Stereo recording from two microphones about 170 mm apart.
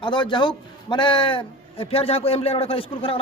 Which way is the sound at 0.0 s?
25° left (ahead or behind).